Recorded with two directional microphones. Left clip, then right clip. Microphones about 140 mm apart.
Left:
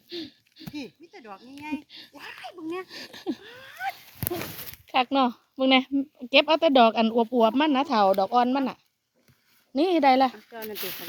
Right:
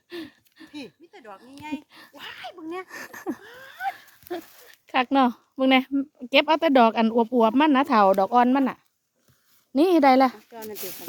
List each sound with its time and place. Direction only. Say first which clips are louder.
0.1 s a sound: even; 15° right (ahead or behind)
0.7 s a sound: left 2 dB; centre (ahead or behind)
2.1 s speech: right 3 dB; 5° left (ahead or behind)
4.9 s a woman's voice: right 2 dB; 25° right (ahead or behind)
5.6 s speech: right 1 dB; 15° right (ahead or behind)
5.9 s speech: right 1 dB; centre (ahead or behind)
6.3 s speech: even; 20° right (ahead or behind); by 10.3 s 40° right (ahead or behind)
10.5 s speech: even; 20° left (ahead or behind)